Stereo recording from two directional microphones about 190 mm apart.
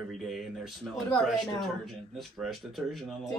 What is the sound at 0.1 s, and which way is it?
Speech, centre (ahead or behind).